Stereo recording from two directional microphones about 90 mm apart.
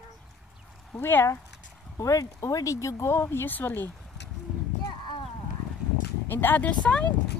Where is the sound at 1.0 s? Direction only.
25° left (ahead or behind).